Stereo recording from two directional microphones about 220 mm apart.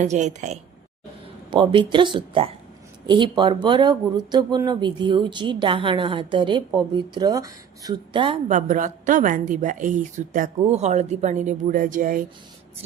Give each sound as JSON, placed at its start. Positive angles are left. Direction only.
{"t": 0.0, "sound": "speech", "side_deg": -30}